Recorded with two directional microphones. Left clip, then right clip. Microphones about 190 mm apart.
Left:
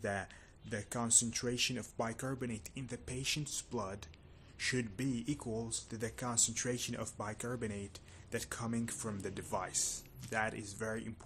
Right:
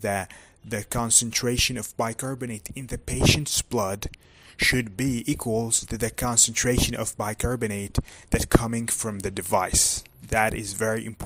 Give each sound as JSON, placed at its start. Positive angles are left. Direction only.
{"t": 0.0, "sound": "speech", "side_deg": -45}